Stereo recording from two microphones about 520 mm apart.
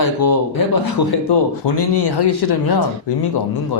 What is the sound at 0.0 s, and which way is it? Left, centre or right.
Speech, left.